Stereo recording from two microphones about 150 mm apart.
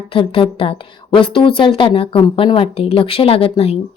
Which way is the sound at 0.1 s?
35° left (ahead or behind).